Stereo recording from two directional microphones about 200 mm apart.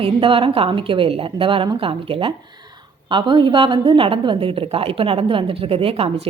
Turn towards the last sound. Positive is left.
turn(degrees=-30)  # may be behind; listen again after turning